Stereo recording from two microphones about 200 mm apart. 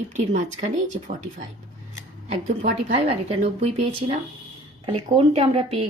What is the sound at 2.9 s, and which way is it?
A woman's voice, 30° right (ahead or behind).